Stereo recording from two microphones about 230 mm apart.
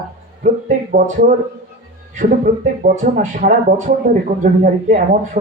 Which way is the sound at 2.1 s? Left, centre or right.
Right.